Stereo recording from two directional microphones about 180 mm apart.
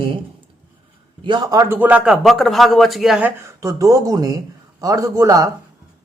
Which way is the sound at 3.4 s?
15° right (ahead or behind).